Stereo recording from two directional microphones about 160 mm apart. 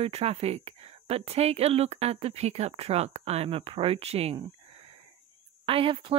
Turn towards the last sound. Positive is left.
turn(degrees=-35)  # may be behind; listen again after turning